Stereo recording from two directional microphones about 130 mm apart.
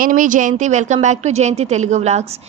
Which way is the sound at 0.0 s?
90° right.